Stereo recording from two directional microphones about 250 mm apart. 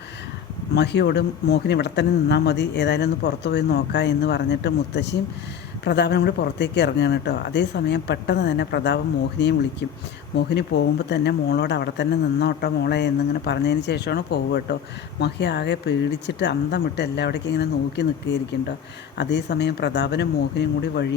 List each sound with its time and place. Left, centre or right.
0.7 s speech: left